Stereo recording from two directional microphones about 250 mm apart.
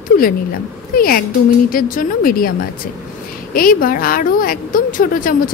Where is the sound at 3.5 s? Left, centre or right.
Left.